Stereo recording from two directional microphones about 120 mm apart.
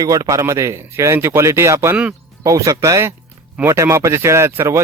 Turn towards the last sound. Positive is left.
turn(degrees=-25)  # may be behind; listen again after turning